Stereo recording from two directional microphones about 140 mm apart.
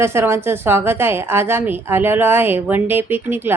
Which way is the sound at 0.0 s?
20° right (ahead or behind).